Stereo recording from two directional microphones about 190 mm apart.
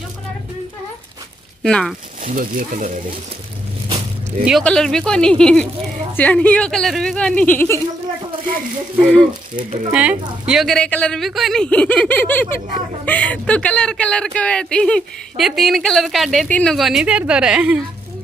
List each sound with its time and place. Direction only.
1.6 s speech: 5° left (ahead or behind)
2.2 s speech: 45° right (ahead or behind)
4.5 s speech: centre (ahead or behind)
9.0 s speech: 5° left (ahead or behind)